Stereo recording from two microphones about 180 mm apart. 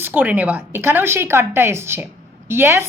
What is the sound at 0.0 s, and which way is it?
A woman's voice, 10° right (ahead or behind).